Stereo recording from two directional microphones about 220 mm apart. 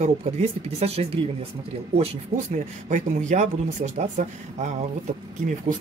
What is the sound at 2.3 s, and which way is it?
Speech, 40° right (ahead or behind).